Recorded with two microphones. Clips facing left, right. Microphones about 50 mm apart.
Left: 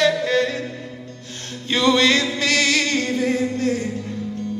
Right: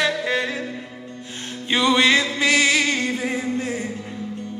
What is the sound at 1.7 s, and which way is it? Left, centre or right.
Music, centre.